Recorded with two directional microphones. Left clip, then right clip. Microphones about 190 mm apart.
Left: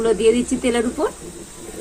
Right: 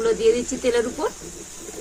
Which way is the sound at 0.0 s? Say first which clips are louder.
Left 3 dB; 40° left (ahead or behind).